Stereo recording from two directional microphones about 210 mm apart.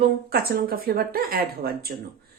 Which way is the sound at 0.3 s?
45° right (ahead or behind).